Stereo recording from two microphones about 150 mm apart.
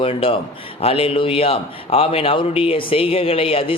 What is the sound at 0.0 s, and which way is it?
Speech, 40° left (ahead or behind).